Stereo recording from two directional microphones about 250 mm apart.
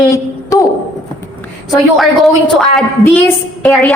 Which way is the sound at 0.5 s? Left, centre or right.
Centre.